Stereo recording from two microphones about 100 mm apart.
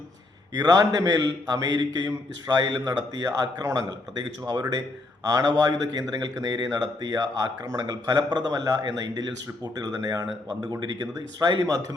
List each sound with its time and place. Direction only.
0.5 s a man's voice: 40° right (ahead or behind)